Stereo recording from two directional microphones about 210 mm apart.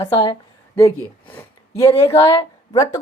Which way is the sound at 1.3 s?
10° left (ahead or behind).